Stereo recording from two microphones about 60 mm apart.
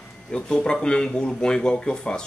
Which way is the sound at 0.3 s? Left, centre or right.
Centre.